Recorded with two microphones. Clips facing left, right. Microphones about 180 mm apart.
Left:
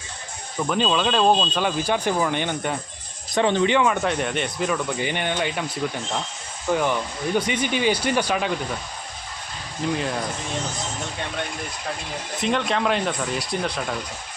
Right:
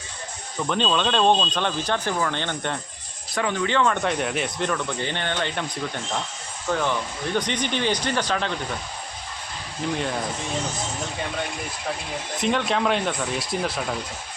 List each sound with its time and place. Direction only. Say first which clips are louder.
0.7 s speech: left 1 dB; 5° left (ahead or behind)
3.3 s speech: left 5 dB; 25° left (ahead or behind)
3.7 s speech: left 2 dB; 15° left (ahead or behind)
4.0 s speech: left 1 dB; centre (ahead or behind)
9.9 s speech: left 1 dB; centre (ahead or behind)
12.4 s speech: even; centre (ahead or behind)